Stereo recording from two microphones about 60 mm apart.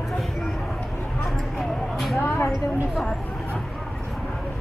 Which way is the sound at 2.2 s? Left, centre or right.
Left.